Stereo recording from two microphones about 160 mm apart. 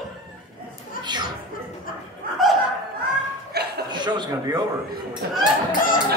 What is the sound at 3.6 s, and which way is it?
Chuckle, 90° right.